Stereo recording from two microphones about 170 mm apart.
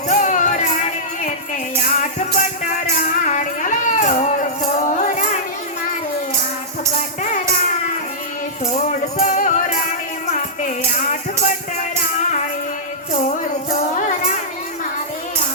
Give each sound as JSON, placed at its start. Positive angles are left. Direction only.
{"t": 0.1, "sound": "music", "side_deg": 45}
{"t": 1.9, "sound": "music", "side_deg": 45}
{"t": 8.6, "sound": "music", "side_deg": 40}